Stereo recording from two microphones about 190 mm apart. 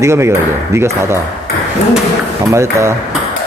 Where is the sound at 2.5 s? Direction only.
15° right (ahead or behind).